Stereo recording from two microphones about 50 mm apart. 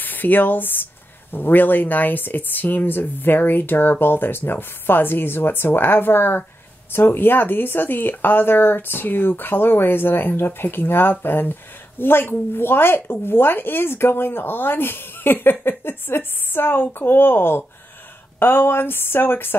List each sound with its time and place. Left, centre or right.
0.0 s speech: left